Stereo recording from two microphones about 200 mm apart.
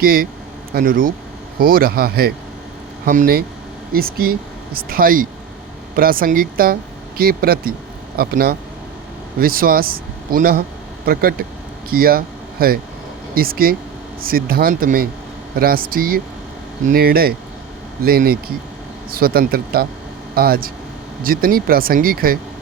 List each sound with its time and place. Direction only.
0.0 s speech: 50° right (ahead or behind)